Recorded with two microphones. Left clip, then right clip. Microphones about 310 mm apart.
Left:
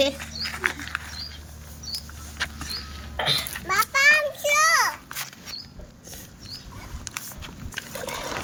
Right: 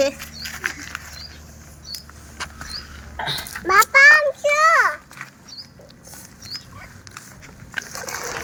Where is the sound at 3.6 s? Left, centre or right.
Centre.